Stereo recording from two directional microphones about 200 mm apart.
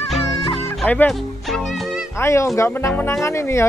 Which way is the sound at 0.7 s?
5° left (ahead or behind).